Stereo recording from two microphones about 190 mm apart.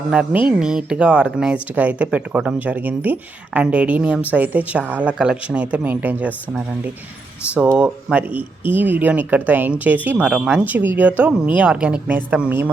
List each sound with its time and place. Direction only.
0.1 s speech: 5° right (ahead or behind)
7.5 s speech: 5° right (ahead or behind)
8.3 s speech: 25° left (ahead or behind)
8.7 s speech: 10° right (ahead or behind)